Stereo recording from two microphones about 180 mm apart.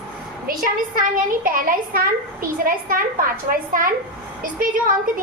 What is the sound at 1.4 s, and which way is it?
A child's voice, 50° right (ahead or behind).